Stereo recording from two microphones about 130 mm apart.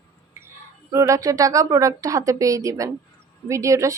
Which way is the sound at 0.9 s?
25° right (ahead or behind).